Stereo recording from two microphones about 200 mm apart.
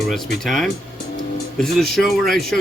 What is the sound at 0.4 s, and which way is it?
A man's voice, centre (ahead or behind).